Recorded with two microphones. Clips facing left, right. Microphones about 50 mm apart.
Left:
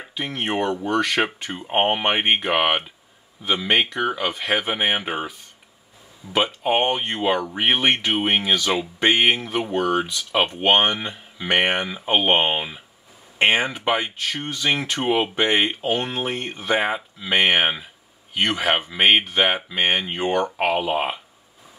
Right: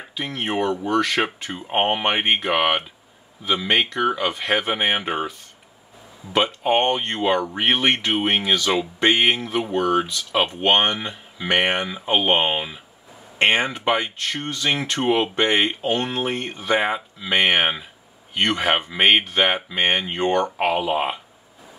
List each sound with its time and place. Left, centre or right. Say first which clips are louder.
0.1 s speech: even; centre
6.3 s speech: right 1 dB; centre